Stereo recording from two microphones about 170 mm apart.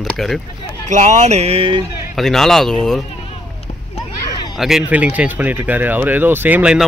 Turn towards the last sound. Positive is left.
turn(degrees=-5)  # may be behind; listen again after turning